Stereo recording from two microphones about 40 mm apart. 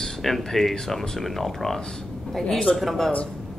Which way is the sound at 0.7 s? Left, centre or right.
Centre.